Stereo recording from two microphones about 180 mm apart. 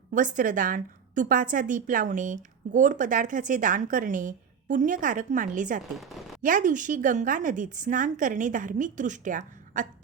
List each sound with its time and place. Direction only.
0.1 s a woman's voice: 45° right (ahead or behind)
6.0 s a sound: centre (ahead or behind)
6.4 s a woman's voice: 45° right (ahead or behind)